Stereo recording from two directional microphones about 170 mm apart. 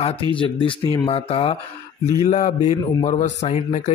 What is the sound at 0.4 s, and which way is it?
Speech, 30° left (ahead or behind).